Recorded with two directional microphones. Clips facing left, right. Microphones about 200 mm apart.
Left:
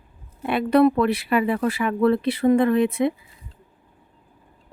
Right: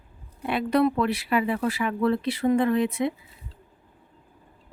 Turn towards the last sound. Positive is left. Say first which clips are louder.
# left 4 dB
turn(degrees=55)  # may be behind; listen again after turning